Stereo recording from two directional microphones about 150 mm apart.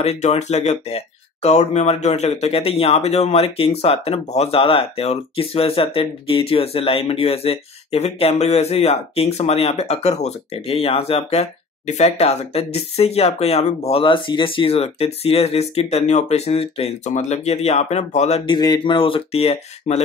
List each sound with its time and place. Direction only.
0.0 s a man's voice: 45° left (ahead or behind)
18.5 s speech: 30° left (ahead or behind)